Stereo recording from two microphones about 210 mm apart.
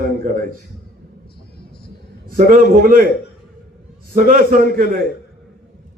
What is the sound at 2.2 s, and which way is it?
Speech, 40° right (ahead or behind).